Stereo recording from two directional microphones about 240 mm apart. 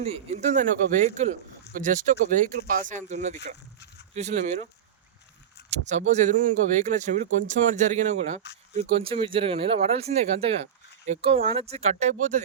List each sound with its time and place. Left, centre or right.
0.0 s speech: right
5.7 s speech: right